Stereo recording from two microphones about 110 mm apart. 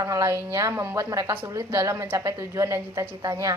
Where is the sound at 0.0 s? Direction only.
30° right (ahead or behind).